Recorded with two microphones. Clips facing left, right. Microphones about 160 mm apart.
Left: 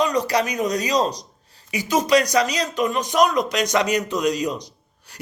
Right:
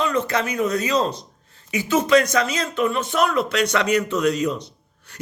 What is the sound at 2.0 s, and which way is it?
A man's voice, 15° left (ahead or behind).